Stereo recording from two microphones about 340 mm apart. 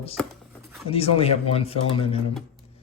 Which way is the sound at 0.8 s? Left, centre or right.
Centre.